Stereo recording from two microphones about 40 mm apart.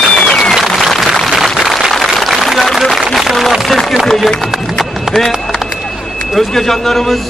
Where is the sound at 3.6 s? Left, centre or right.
Centre.